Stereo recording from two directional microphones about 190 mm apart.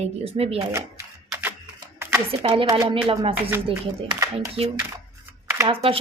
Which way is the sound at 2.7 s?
20° right (ahead or behind).